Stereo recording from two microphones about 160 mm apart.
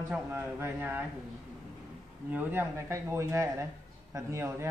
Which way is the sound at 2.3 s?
10° right (ahead or behind).